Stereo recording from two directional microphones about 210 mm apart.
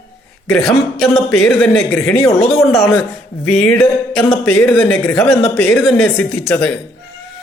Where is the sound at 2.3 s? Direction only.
30° left (ahead or behind).